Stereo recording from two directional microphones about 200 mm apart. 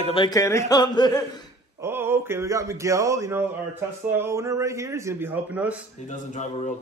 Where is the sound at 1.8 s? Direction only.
10° right (ahead or behind).